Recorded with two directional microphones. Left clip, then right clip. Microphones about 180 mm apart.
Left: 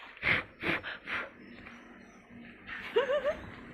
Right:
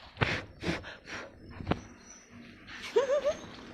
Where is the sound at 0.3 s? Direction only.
10° right (ahead or behind).